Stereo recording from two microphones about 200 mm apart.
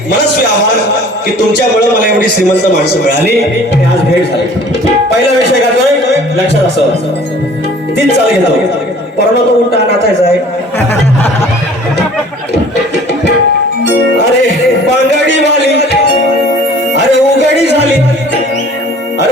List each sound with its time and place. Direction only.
16.9 s music: 60° left (ahead or behind)